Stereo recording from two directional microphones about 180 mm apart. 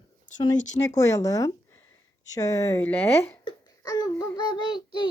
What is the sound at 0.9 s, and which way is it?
A child's voice, 20° left (ahead or behind).